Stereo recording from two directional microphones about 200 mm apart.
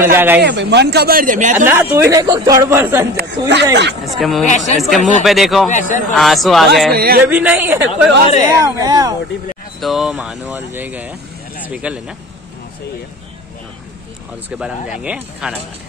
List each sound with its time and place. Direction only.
0.0 s speech: 10° right (ahead or behind)
0.4 s speech: 60° right (ahead or behind); by 1.7 s 40° right (ahead or behind)
1.7 s speech: 10° right (ahead or behind)
3.2 s speech: 60° right (ahead or behind)
4.0 s speech: centre (ahead or behind)
4.5 s a man's voice: 35° left (ahead or behind)
4.7 s speech: centre (ahead or behind)
5.7 s a man's voice: 40° left (ahead or behind)
6.1 s speech: centre (ahead or behind)
6.9 s speech: 50° right (ahead or behind)
7.2 s speech: 10° right (ahead or behind)
9.8 s speech: centre (ahead or behind)
14.6 s speech: 5° right (ahead or behind)